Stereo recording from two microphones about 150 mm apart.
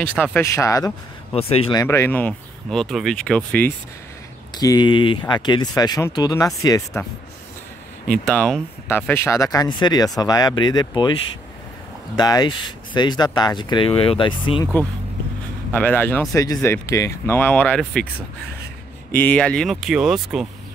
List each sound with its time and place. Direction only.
0.0 s speech: 10° left (ahead or behind)
1.3 s speech: 40° left (ahead or behind)
1.7 s speech: 20° left (ahead or behind)
4.6 s speech: 25° left (ahead or behind)
8.3 s speech: 5° left (ahead or behind); by 11.1 s 30° left (ahead or behind)
12.2 s speech: 25° left (ahead or behind)
14.6 s speech: 15° left (ahead or behind)
19.1 s speech: 10° left (ahead or behind)